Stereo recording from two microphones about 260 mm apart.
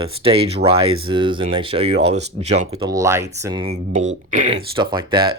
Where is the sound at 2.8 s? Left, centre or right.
Centre.